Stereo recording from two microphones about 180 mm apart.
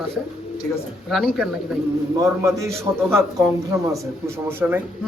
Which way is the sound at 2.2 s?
20° right (ahead or behind).